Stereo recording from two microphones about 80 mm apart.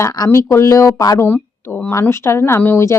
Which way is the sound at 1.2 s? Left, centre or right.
Left.